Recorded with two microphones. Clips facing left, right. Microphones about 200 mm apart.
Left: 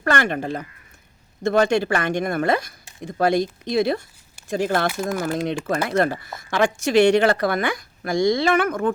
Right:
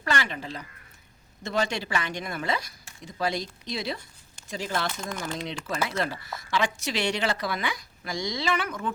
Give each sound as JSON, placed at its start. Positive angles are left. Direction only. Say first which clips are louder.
{"t": 0.0, "sound": "speech", "louder": "left 8 dB", "side_deg": 55}
{"t": 4.9, "sound": "speech", "louder": "left 9 dB", "side_deg": 5}
{"t": 5.2, "sound": "speech", "louder": "left 10 dB", "side_deg": 50}